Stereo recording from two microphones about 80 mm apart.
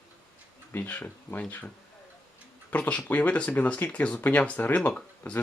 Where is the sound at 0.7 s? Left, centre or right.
Left.